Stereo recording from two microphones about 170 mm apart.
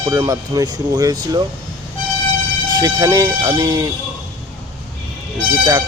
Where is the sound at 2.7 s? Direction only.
25° right (ahead or behind).